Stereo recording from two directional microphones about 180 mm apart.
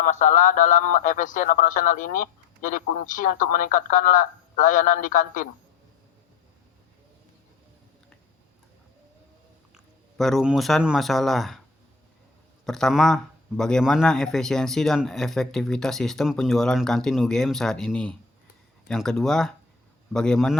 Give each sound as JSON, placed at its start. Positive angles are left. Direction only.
{"t": 0.0, "sound": "speech", "side_deg": 45}
{"t": 9.7, "sound": "speech", "side_deg": 0}
{"t": 12.6, "sound": "a man's voice", "side_deg": 0}